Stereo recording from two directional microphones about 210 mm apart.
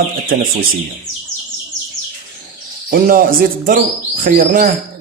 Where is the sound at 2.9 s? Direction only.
45° right (ahead or behind).